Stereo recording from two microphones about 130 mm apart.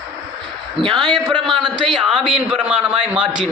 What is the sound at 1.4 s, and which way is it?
A man's voice, centre (ahead or behind).